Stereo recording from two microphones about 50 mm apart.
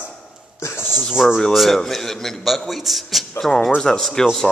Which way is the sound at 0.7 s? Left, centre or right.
Left.